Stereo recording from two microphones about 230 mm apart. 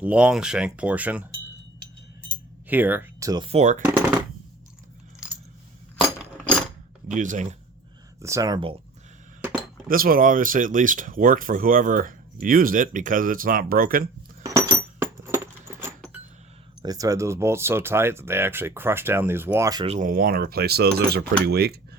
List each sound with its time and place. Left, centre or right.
0.0 s speech: centre
2.6 s speech: centre; by 3.8 s right
6.3 s a sound: centre
7.1 s speech: right
8.2 s speech: centre
9.4 s a sound: centre
9.9 s speech: right
14.4 s a sound: centre
16.8 s speech: centre
19.9 s speech: right